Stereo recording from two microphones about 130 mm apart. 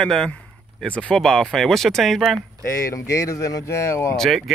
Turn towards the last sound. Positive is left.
turn(degrees=0)  # may be behind; listen again after turning